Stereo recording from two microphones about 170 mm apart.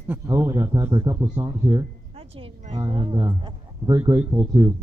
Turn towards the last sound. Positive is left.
turn(degrees=-15)  # may be behind; listen again after turning